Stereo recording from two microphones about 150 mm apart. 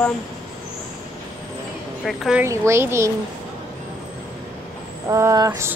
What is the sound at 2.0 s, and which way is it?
Speech, 5° right (ahead or behind).